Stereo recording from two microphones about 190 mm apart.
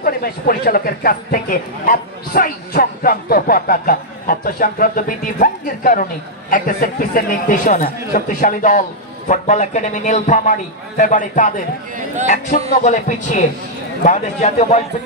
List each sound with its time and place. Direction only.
0.0 s a man's voice: 50° left (ahead or behind)